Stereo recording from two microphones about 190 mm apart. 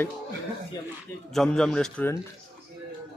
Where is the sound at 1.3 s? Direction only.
5° left (ahead or behind).